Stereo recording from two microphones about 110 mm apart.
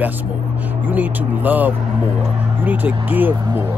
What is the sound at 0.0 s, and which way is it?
Speech, 15° right (ahead or behind).